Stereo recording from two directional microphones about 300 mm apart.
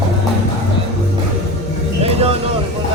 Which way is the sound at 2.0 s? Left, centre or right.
Centre.